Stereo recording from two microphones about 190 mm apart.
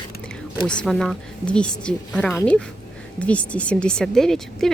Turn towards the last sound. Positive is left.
turn(degrees=0)  # may be behind; listen again after turning